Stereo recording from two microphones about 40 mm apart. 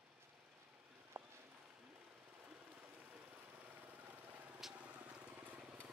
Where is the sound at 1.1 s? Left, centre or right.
Right.